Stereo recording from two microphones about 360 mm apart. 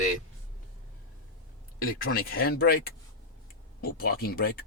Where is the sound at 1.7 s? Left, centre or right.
Left.